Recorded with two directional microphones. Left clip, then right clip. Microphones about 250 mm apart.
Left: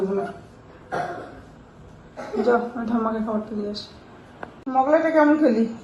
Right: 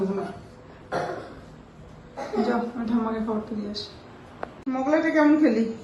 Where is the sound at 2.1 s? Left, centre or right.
Centre.